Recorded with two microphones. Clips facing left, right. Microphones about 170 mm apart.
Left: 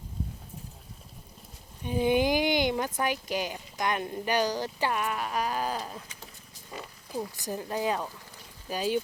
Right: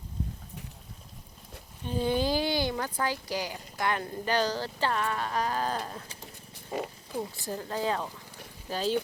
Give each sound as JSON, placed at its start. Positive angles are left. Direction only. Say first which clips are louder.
{"t": 1.8, "sound": "speech", "louder": "left 3 dB", "side_deg": 15}
{"t": 6.7, "sound": "speech", "louder": "right 8 dB", "side_deg": -50}
{"t": 7.4, "sound": "speech", "louder": "left 2 dB", "side_deg": 15}